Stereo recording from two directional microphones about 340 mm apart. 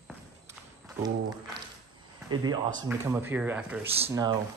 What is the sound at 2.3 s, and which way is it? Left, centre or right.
Speech, centre.